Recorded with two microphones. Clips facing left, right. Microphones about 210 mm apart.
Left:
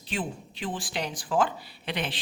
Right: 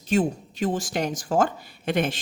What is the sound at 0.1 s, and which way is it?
Speech, 45° right (ahead or behind).